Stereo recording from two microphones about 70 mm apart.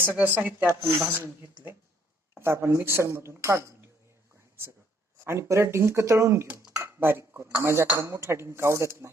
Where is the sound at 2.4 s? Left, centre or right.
Right.